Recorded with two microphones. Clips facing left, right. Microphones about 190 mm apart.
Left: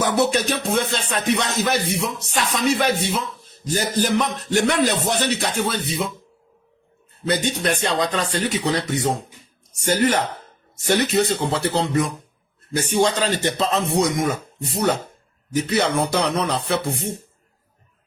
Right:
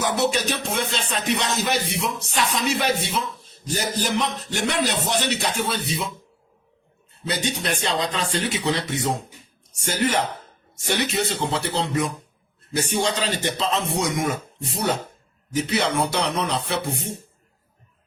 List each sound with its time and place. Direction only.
0.0 s a man's voice: 50° left (ahead or behind)
7.3 s a man's voice: 50° left (ahead or behind)